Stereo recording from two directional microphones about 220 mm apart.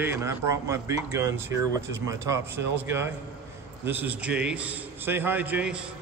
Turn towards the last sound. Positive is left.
turn(degrees=-5)  # may be behind; listen again after turning